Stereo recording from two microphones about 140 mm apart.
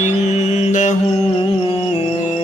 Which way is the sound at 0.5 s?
60° left (ahead or behind).